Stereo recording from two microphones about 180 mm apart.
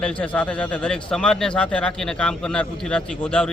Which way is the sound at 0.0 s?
5° left (ahead or behind).